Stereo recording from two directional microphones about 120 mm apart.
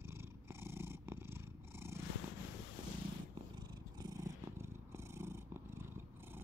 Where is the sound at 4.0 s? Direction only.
25° right (ahead or behind).